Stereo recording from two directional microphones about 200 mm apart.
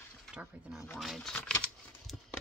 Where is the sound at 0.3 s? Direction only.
5° right (ahead or behind).